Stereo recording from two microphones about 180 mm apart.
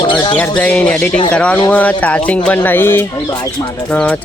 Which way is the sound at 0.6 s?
5° left (ahead or behind).